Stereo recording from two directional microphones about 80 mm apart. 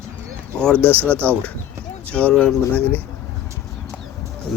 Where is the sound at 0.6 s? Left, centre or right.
Centre.